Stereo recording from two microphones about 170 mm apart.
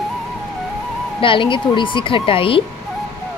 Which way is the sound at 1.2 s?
30° left (ahead or behind).